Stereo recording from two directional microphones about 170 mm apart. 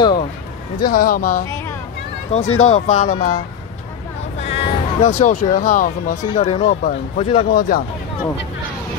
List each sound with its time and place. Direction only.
0.8 s speech: 60° left (ahead or behind)
1.5 s a sound: 15° left (ahead or behind)
2.3 s speech: 40° left (ahead or behind)
3.2 s speech: 55° left (ahead or behind)
4.4 s speech: 35° left (ahead or behind); by 6.1 s 55° left (ahead or behind)
6.3 s speech: 35° left (ahead or behind)
7.5 s speech: 60° left (ahead or behind)